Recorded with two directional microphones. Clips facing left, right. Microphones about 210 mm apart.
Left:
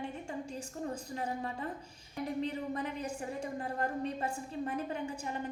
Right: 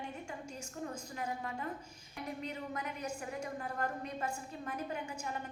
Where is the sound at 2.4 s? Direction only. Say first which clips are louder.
Left 6 dB; 30° left (ahead or behind).